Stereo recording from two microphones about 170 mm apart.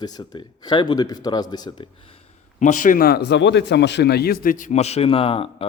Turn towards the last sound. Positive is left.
turn(degrees=35)  # may be behind; listen again after turning